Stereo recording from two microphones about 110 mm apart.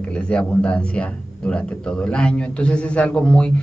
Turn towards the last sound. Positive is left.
turn(degrees=10)  # may be behind; listen again after turning